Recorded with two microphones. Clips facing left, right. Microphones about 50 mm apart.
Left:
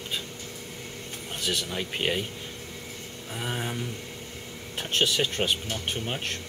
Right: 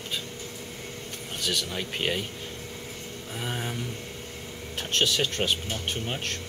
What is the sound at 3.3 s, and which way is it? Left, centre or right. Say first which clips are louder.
Speech: left 1 dB; centre.